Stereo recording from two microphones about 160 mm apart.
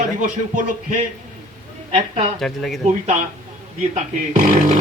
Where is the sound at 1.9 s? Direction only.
40° right (ahead or behind).